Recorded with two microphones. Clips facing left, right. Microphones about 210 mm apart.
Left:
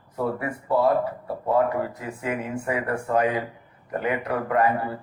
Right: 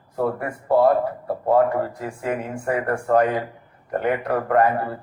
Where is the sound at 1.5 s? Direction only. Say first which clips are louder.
Right 3 dB; 50° right (ahead or behind).